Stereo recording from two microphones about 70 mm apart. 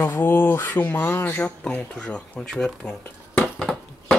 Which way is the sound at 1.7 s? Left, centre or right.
Centre.